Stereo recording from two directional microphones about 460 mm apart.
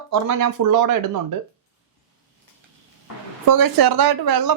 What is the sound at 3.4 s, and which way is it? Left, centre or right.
Speech, right.